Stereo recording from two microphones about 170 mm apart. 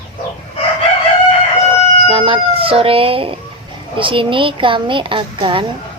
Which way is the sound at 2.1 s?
30° right (ahead or behind).